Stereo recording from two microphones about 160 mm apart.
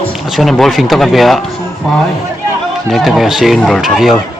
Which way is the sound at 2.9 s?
Centre (ahead or behind).